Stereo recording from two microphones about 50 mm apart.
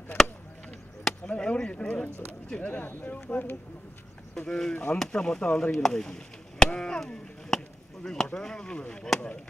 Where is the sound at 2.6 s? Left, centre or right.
Left.